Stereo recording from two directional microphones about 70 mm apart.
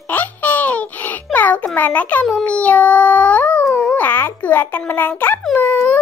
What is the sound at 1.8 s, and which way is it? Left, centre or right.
Speech, left.